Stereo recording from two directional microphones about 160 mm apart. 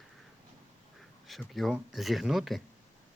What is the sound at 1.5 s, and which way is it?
Speech, centre (ahead or behind).